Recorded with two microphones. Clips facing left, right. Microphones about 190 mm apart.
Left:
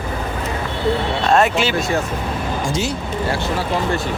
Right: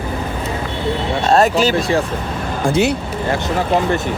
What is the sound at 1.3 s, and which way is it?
Speech, 40° right (ahead or behind).